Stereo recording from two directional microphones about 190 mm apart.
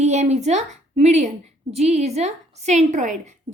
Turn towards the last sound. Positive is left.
turn(degrees=-40)  # may be behind; listen again after turning